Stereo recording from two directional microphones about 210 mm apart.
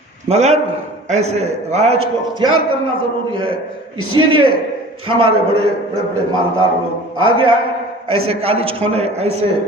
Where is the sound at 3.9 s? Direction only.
80° right.